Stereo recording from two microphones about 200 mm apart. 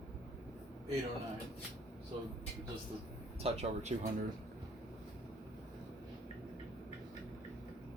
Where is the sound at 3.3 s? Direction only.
30° right (ahead or behind).